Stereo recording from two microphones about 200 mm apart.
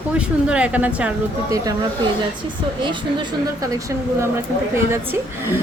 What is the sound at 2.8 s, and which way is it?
A woman's voice, 25° right (ahead or behind).